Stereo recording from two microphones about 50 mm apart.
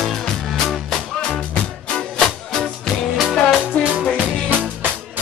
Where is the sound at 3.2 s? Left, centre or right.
Centre.